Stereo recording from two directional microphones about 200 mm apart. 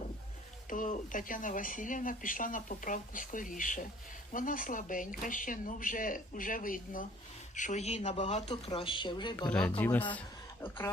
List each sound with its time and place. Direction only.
0.7 s speech: 40° left (ahead or behind); by 9.5 s 20° left (ahead or behind)
9.5 s speech: 5° left (ahead or behind)